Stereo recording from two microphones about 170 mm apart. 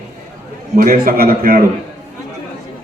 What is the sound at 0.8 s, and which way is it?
Speech, 60° right (ahead or behind).